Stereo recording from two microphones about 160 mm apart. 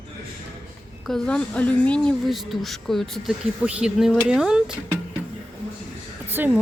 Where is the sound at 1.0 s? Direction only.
5° left (ahead or behind).